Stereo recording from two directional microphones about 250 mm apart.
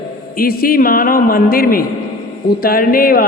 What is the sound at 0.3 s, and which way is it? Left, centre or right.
A man's voice, left.